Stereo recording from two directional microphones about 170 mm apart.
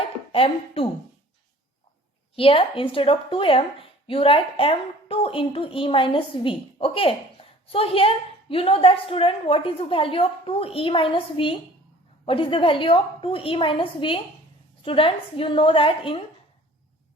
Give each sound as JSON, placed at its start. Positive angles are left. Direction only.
{"t": 0.3, "sound": "speech", "side_deg": 35}
{"t": 2.3, "sound": "a woman's voice", "side_deg": 35}